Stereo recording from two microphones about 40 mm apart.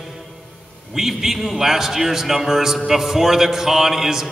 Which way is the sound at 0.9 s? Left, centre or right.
Centre.